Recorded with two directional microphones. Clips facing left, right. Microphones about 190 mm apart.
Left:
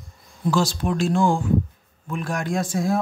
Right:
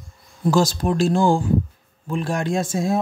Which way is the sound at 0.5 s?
40° right (ahead or behind).